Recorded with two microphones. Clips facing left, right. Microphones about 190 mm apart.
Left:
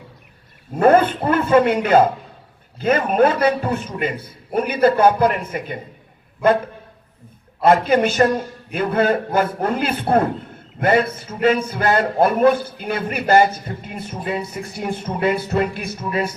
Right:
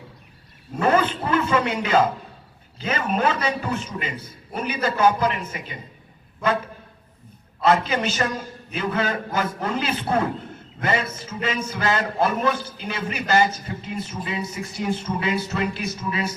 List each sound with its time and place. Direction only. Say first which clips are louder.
0.8 s a man's voice: left 6 dB; 55° left (ahead or behind)
7.6 s a man's voice: left 6 dB; 55° left (ahead or behind)